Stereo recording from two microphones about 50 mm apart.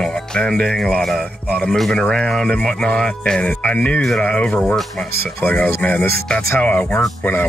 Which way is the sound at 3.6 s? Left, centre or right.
Left.